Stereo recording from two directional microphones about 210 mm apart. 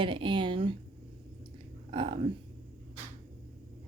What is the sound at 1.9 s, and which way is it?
Speech, 25° right (ahead or behind).